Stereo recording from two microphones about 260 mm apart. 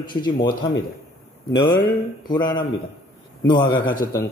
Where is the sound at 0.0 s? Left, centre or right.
Centre.